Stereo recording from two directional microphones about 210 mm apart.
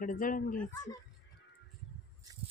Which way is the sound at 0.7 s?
20° left (ahead or behind).